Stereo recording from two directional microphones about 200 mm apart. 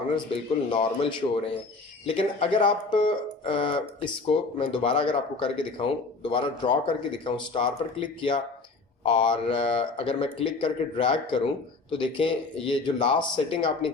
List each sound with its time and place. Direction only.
0.3 s speech: 25° left (ahead or behind)